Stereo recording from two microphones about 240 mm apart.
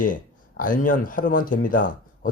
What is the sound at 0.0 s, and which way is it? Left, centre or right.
Speech, left.